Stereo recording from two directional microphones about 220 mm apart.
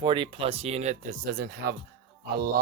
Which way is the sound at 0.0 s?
20° right (ahead or behind).